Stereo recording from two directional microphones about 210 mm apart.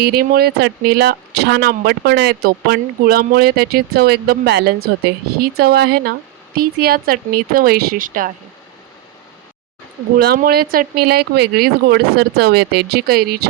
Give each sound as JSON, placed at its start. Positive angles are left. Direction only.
{"t": 0.0, "sound": "speech", "side_deg": -45}
{"t": 10.2, "sound": "speech", "side_deg": -45}